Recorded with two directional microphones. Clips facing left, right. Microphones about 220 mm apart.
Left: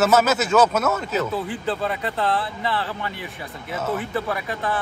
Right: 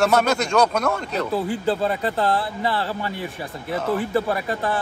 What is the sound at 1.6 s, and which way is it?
Speech, 30° right (ahead or behind).